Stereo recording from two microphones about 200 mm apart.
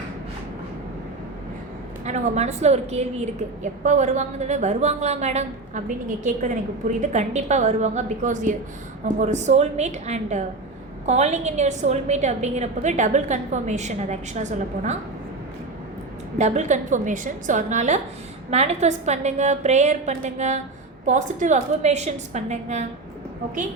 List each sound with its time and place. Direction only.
2.0 s a woman's voice: 35° right (ahead or behind)
16.4 s a woman's voice: 35° right (ahead or behind)